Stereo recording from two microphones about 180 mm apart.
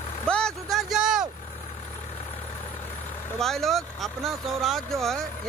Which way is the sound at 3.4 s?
Centre (ahead or behind).